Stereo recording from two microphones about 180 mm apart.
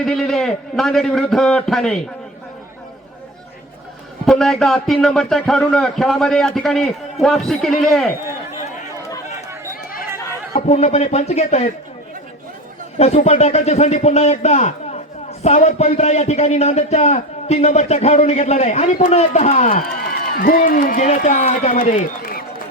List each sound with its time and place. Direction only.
0.0 s a man's voice: centre (ahead or behind)
4.3 s a man's voice: centre (ahead or behind)
10.7 s a man's voice: 40° left (ahead or behind)
13.0 s a man's voice: 40° left (ahead or behind)
20.0 s a man's voice: 55° left (ahead or behind)